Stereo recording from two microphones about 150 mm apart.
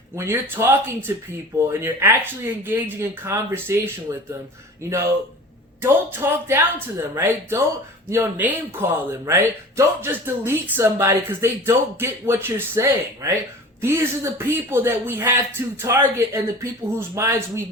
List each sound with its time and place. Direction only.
0.2 s speech: 15° right (ahead or behind)